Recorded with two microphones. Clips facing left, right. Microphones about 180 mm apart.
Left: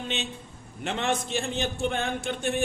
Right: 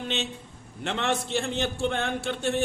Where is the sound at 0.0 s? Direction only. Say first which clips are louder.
Right 2 dB; 15° left (ahead or behind).